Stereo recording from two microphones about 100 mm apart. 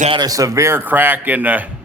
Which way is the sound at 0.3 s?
35° right (ahead or behind).